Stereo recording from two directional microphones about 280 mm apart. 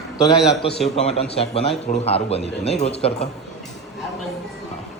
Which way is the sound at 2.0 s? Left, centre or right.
Left.